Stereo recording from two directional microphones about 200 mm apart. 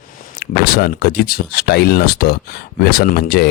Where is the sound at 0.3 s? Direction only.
50° left (ahead or behind).